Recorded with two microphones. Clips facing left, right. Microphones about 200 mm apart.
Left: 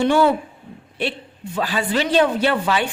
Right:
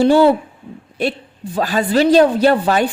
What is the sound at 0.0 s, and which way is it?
A man's voice, 35° right (ahead or behind).